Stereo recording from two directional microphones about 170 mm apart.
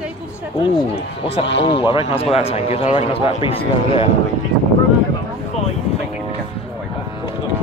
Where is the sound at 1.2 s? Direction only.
90° left.